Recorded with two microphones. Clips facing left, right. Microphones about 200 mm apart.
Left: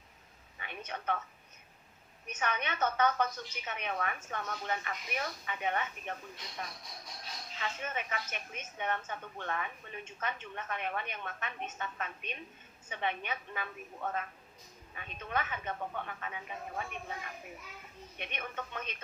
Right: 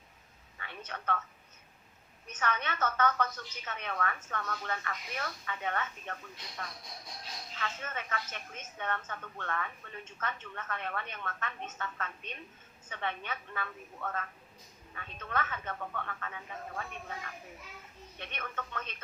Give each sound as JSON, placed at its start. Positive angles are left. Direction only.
{"t": 0.6, "sound": "a man's voice", "side_deg": 15}
{"t": 2.2, "sound": "a woman's voice", "side_deg": 15}
{"t": 18.2, "sound": "a woman's voice", "side_deg": 15}